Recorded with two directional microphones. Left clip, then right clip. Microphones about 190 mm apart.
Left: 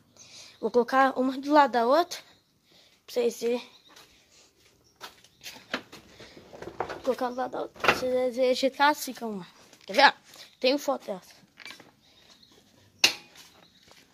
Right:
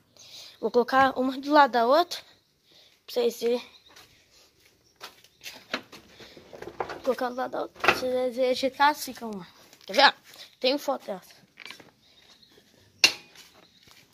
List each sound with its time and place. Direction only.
0.2 s a woman's voice: centre (ahead or behind)
7.1 s speech: centre (ahead or behind)
8.0 s speech: 5° left (ahead or behind)